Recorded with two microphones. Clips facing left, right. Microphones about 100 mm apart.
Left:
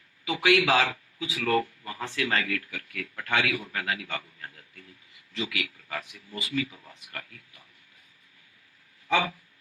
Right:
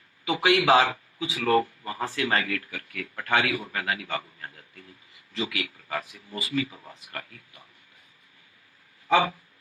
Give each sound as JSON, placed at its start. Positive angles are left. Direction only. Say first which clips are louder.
{"t": 0.3, "sound": "a man's voice", "louder": "right 2 dB", "side_deg": -30}
{"t": 9.0, "sound": "speech", "louder": "right 4 dB", "side_deg": -35}